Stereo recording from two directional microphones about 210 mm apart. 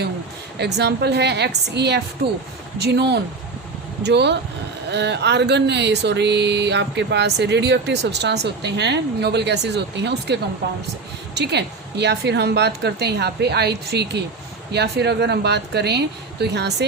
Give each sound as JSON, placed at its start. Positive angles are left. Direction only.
{"t": 0.6, "sound": "speech", "side_deg": -55}
{"t": 11.3, "sound": "speech", "side_deg": -55}